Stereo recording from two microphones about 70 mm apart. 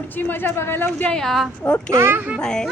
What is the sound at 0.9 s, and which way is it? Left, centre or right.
Speech, centre.